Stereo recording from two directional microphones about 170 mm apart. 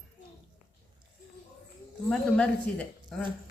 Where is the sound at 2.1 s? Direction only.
5° left (ahead or behind).